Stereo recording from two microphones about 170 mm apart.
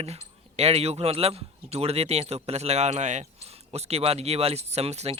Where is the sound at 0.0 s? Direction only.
40° right (ahead or behind).